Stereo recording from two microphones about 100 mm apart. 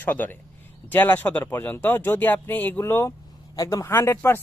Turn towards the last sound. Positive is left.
turn(degrees=25)  # may be behind; listen again after turning